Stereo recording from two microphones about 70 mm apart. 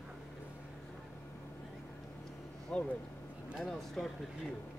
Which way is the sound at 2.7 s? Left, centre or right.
Centre.